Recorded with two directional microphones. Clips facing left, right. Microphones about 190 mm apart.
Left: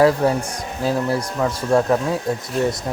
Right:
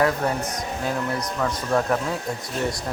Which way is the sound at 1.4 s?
25° left (ahead or behind).